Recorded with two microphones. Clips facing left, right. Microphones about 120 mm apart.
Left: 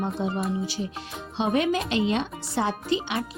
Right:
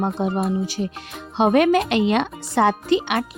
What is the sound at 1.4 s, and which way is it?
Speech, 65° right (ahead or behind).